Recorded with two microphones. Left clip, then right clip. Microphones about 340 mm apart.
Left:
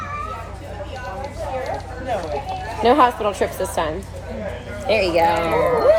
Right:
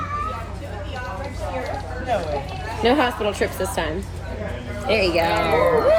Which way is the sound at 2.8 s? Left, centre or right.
Left.